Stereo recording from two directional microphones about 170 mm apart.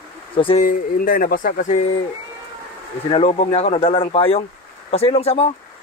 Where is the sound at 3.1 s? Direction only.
35° left (ahead or behind).